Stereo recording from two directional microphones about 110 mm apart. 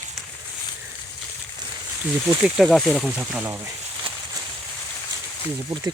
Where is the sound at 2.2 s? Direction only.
10° right (ahead or behind).